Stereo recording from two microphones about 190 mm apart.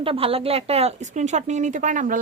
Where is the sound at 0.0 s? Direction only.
30° right (ahead or behind).